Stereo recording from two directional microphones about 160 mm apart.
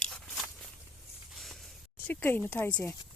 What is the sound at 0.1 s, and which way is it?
Walk, centre (ahead or behind).